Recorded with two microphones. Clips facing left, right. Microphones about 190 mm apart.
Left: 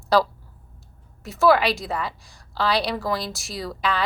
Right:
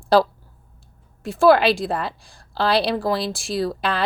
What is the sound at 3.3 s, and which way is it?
Speech, 55° right (ahead or behind).